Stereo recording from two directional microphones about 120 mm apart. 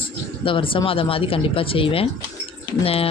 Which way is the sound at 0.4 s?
45° left (ahead or behind).